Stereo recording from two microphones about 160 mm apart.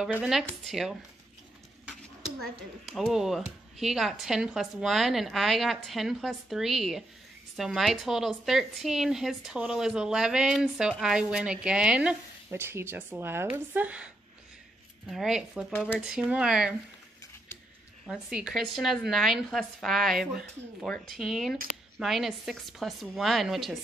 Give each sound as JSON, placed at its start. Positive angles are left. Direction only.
{"t": 0.2, "sound": "speech", "side_deg": 0}
{"t": 1.9, "sound": "a sound", "side_deg": 0}
{"t": 2.9, "sound": "speech", "side_deg": -5}
{"t": 18.0, "sound": "speech", "side_deg": -5}